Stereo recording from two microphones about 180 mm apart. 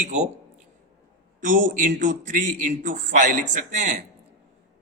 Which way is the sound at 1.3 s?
50° right (ahead or behind).